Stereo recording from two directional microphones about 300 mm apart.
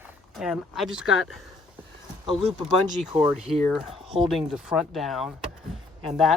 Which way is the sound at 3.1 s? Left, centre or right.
Centre.